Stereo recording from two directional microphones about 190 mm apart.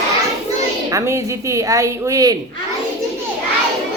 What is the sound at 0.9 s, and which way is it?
Speech, 15° right (ahead or behind).